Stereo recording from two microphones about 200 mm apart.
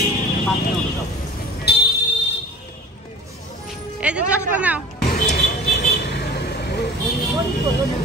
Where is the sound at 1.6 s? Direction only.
55° left (ahead or behind).